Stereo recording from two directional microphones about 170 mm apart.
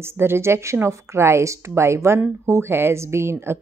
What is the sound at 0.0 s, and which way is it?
A woman's voice, 15° right (ahead or behind).